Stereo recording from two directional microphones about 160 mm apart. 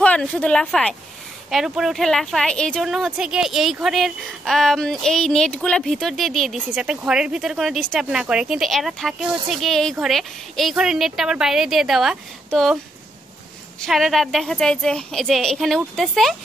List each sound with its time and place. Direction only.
0.0 s a woman's voice: 10° left (ahead or behind)
13.7 s a woman's voice: centre (ahead or behind)